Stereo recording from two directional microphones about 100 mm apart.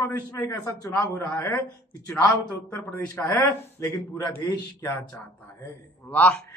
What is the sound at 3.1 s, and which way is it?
Speech, 20° left (ahead or behind).